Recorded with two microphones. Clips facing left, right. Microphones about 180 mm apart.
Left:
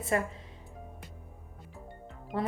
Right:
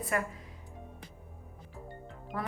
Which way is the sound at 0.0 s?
25° left (ahead or behind).